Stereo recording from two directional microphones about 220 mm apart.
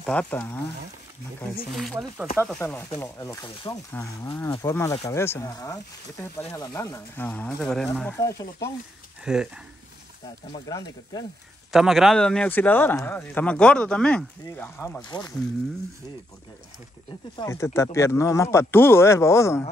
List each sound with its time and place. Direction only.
0.0 s speech: 5° left (ahead or behind)
1.8 s speech: centre (ahead or behind)
8.2 s speech: 15° left (ahead or behind)
9.2 s speech: 5° right (ahead or behind)
10.5 s speech: 20° left (ahead or behind)
11.7 s speech: centre (ahead or behind)
15.0 s speech: 15° left (ahead or behind)
17.4 s speech: 15° left (ahead or behind)